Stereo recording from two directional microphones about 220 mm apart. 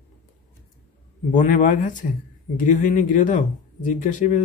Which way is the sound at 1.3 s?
35° left (ahead or behind).